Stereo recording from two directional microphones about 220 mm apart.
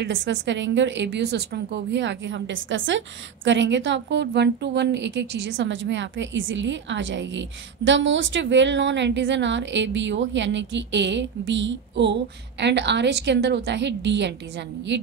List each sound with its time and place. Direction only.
0.0 s a woman's voice: 60° right (ahead or behind)